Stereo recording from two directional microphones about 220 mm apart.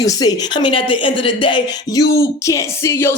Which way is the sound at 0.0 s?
15° left (ahead or behind).